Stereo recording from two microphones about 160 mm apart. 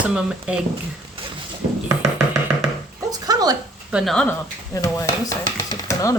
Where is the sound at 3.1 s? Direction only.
25° right (ahead or behind).